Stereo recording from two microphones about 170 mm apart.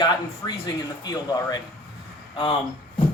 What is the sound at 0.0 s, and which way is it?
Speech, 25° left (ahead or behind).